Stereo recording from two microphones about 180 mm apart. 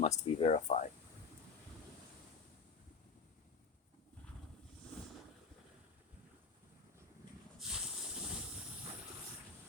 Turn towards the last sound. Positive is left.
turn(degrees=-5)  # may be behind; listen again after turning